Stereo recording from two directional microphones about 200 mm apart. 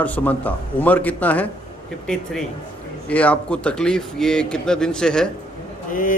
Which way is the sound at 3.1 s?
5° left (ahead or behind).